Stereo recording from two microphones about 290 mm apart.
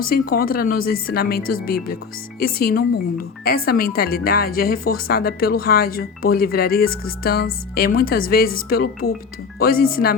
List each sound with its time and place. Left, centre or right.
0.1 s speech: left